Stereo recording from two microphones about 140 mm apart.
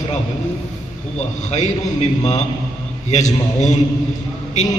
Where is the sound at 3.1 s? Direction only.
60° left (ahead or behind).